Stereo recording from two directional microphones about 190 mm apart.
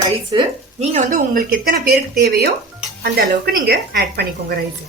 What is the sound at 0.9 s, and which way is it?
A woman's voice, 45° right (ahead or behind).